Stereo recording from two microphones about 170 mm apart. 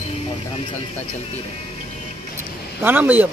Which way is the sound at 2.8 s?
10° right (ahead or behind).